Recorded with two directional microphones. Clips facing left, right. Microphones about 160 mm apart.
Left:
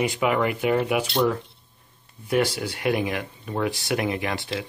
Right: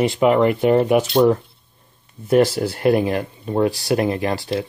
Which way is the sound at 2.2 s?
40° right (ahead or behind).